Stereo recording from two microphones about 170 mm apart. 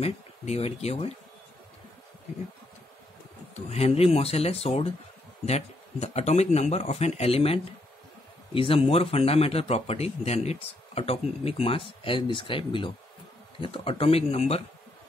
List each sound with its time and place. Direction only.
0.0 s a man's voice: 40° left (ahead or behind)
3.5 s a man's voice: 35° left (ahead or behind)